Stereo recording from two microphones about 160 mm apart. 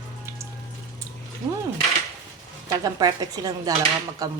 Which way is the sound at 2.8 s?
25° right (ahead or behind).